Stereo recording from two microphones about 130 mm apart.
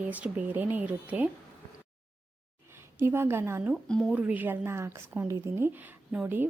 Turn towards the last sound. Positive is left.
turn(degrees=-15)  # may be behind; listen again after turning